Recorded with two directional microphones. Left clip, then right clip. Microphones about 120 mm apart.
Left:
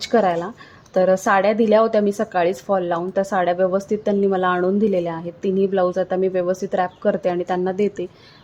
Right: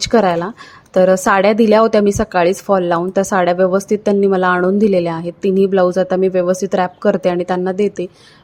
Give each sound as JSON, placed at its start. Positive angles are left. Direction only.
{"t": 0.0, "sound": "a woman's voice", "side_deg": -30}